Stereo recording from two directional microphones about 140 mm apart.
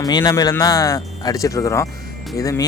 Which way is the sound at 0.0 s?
30° left (ahead or behind).